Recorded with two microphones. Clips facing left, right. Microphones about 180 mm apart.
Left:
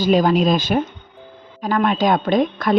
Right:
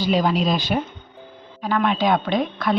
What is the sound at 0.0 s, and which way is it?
A woman's voice, 45° left (ahead or behind).